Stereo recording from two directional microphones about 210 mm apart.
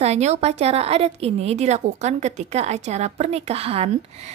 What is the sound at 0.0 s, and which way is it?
A woman's voice, 30° right (ahead or behind).